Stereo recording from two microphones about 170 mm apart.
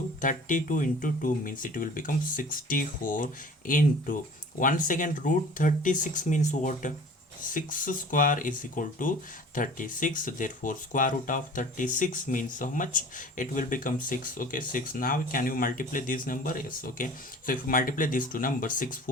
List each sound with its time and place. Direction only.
0.2 s speech: 50° left (ahead or behind)